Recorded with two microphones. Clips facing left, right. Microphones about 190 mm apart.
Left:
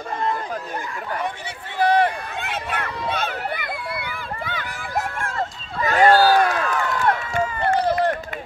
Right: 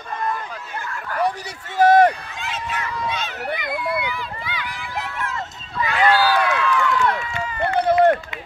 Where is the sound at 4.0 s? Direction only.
55° left (ahead or behind).